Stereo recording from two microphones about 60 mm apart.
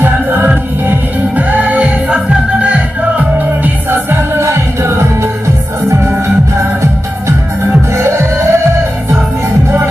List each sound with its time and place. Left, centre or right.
0.0 s music: right
3.6 s music: right
8.0 s music: right